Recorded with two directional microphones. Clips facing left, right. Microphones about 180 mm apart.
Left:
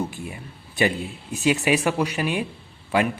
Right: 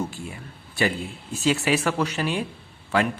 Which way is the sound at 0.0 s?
20° left (ahead or behind).